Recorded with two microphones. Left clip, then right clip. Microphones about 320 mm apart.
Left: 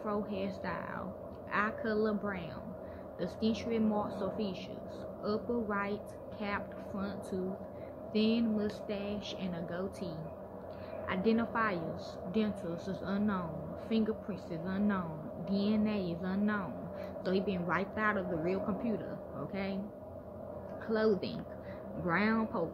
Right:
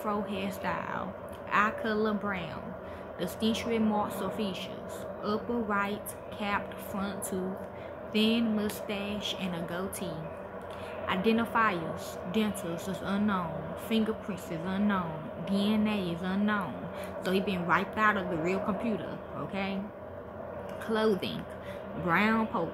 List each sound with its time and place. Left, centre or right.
0.0 s a woman's voice: centre
20.8 s a woman's voice: centre